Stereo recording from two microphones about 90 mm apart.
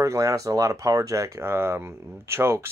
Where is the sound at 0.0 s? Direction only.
35° right (ahead or behind).